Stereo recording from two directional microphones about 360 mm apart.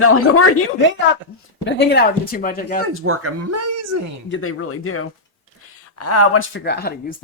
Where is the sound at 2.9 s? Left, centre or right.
Right.